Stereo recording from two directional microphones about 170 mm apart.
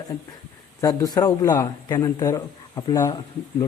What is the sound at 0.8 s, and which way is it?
A man's voice, 20° left (ahead or behind).